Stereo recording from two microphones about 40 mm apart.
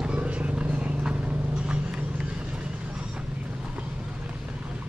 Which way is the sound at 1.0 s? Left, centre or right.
Right.